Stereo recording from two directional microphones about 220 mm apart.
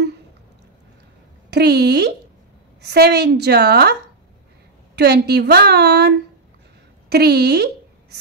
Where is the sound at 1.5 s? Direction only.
50° right (ahead or behind).